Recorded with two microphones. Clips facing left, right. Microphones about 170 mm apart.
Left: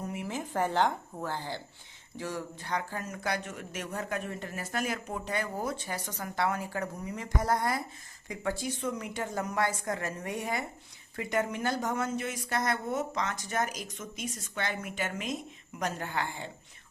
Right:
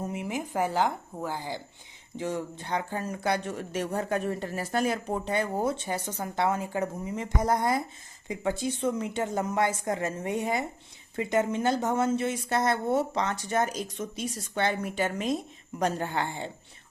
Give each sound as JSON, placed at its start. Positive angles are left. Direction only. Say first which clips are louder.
{"t": 0.0, "sound": "a woman's voice", "louder": "right 3 dB", "side_deg": -20}